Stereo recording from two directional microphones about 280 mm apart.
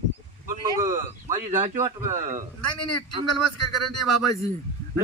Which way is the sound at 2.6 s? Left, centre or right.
Left.